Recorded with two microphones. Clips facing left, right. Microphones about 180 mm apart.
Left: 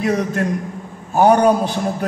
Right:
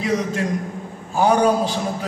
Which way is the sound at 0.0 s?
55° left (ahead or behind).